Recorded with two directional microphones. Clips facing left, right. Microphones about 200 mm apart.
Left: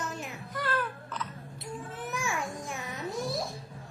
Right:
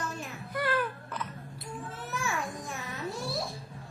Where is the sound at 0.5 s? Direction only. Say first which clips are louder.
Right 3 dB; 10° right (ahead or behind).